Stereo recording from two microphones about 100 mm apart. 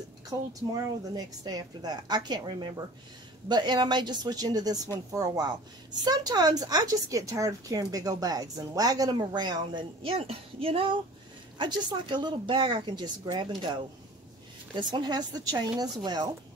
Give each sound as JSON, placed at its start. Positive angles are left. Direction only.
{"t": 0.5, "sound": "a woman's voice", "side_deg": -35}
{"t": 10.0, "sound": "speech", "side_deg": -75}
{"t": 11.5, "sound": "a woman's voice", "side_deg": -50}
{"t": 14.8, "sound": "a woman's voice", "side_deg": -45}